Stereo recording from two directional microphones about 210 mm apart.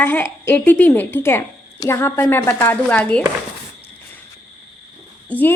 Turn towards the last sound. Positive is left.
turn(degrees=5)  # may be behind; listen again after turning